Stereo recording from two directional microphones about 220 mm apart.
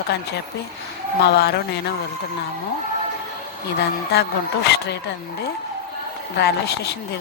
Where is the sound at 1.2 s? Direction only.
45° left (ahead or behind).